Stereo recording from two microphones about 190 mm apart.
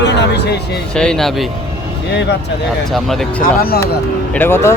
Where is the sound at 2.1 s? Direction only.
65° left (ahead or behind).